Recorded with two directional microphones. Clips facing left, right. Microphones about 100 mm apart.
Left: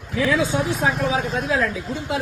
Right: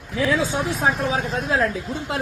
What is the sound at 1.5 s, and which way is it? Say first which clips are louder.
Speech: right 2 dB; 40° right (ahead or behind).